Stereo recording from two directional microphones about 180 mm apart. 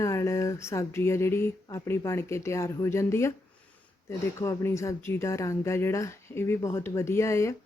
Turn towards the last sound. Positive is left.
turn(degrees=15)  # may be behind; listen again after turning